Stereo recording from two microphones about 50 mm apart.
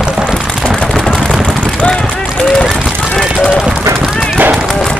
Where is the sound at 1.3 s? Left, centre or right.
Centre.